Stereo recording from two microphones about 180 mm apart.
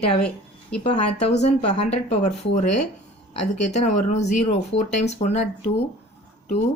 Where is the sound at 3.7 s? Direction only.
40° left (ahead or behind).